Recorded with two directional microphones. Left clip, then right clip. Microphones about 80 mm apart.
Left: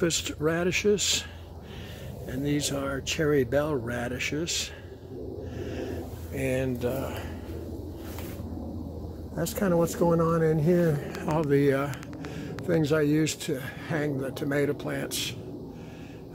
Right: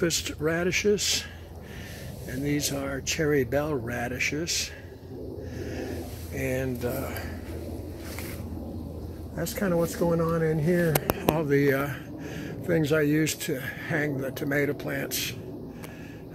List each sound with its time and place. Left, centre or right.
0.0 s speech: left
2.3 s speech: left
5.6 s a sound: left
9.3 s speech: left
9.8 s speech: left
11.4 s speech: left
12.4 s speech: centre; by 15.3 s left